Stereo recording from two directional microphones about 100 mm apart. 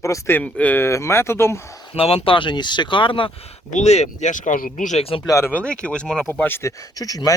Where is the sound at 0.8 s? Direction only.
25° left (ahead or behind).